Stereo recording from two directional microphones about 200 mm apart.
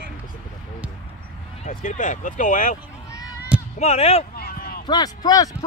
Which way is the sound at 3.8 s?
35° left (ahead or behind).